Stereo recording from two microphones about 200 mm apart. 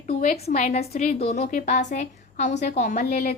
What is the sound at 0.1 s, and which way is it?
A child's voice, 35° left (ahead or behind).